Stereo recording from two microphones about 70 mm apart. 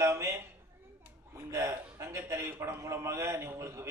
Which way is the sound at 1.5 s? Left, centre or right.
Right.